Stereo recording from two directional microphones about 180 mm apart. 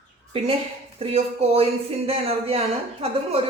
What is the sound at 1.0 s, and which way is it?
Speech, 35° right (ahead or behind).